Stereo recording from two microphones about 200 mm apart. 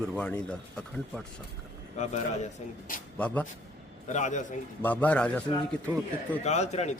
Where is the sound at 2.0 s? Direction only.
35° left (ahead or behind).